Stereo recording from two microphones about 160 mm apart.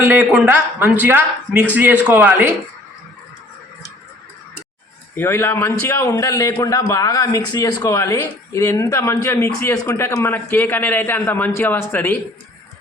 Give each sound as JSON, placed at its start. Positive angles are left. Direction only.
{"t": 0.0, "sound": "speech", "side_deg": -15}
{"t": 5.1, "sound": "a man's voice", "side_deg": 15}